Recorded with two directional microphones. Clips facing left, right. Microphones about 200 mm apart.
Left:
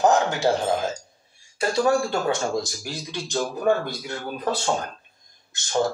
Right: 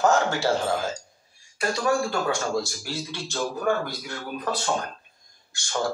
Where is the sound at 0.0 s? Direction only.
15° left (ahead or behind).